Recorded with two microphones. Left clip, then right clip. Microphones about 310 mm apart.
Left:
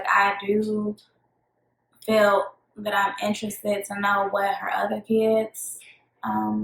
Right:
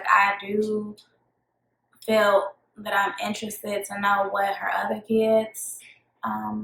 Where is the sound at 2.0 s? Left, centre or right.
Centre.